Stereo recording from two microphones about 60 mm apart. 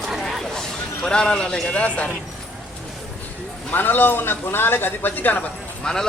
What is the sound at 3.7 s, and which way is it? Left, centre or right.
A man's voice, left.